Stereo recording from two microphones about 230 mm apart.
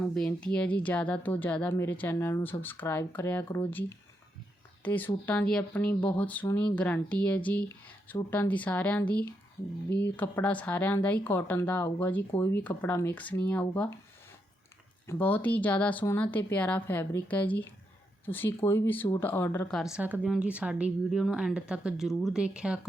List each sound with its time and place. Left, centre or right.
0.1 s speech: centre
15.0 s speech: centre